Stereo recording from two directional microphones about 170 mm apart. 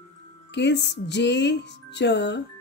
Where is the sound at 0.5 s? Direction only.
90° left.